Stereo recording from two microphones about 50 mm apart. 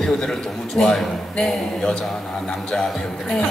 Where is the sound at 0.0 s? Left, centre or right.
Centre.